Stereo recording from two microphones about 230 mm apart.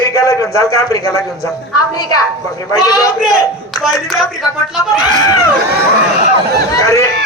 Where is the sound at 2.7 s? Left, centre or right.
Centre.